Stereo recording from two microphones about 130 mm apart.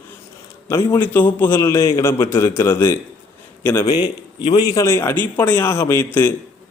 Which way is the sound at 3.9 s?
30° left (ahead or behind).